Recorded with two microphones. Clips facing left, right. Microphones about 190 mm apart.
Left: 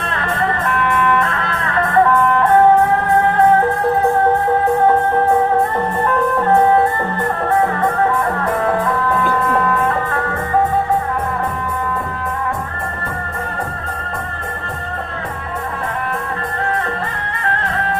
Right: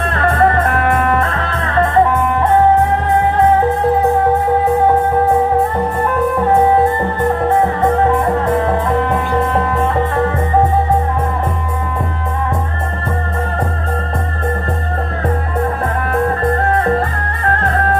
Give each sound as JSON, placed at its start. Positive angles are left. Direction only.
{"t": 0.3, "sound": "music", "side_deg": -50}
{"t": 2.1, "sound": "music", "side_deg": -15}
{"t": 6.5, "sound": "music", "side_deg": -15}
{"t": 9.0, "sound": "music", "side_deg": -20}